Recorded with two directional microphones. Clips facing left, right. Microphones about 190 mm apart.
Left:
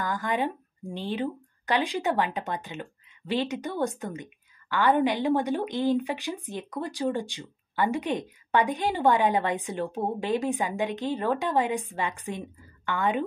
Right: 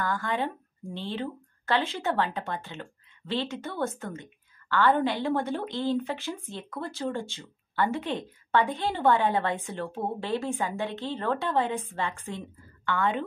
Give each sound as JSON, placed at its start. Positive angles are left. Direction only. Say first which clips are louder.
{"t": 0.0, "sound": "speech", "louder": "left 1 dB", "side_deg": 15}